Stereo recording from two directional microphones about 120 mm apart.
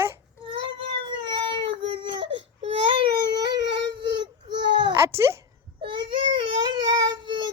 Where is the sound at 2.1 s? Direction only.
45° right (ahead or behind).